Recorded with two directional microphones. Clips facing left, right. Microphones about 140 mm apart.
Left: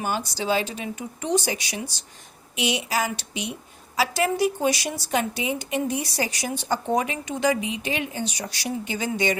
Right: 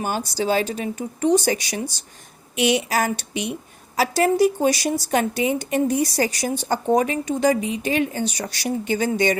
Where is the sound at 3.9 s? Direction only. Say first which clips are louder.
Right 5 dB; 40° right (ahead or behind).